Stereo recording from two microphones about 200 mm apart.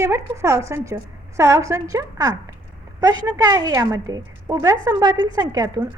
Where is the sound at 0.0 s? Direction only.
15° right (ahead or behind).